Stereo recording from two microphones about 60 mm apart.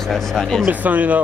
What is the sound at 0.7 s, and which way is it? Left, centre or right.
Speech, right.